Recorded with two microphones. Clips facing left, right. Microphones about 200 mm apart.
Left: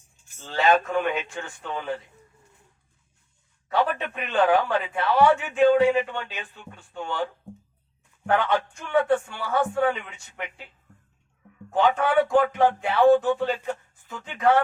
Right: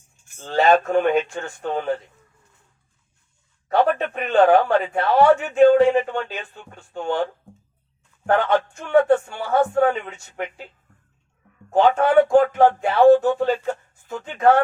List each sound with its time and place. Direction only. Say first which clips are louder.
0.3 s a man's voice: right 4 dB; 45° right (ahead or behind)
3.7 s a man's voice: right 6 dB; 50° right (ahead or behind)
8.3 s a man's voice: right 4 dB; 50° right (ahead or behind)
11.7 s a man's voice: right 5 dB; 45° right (ahead or behind)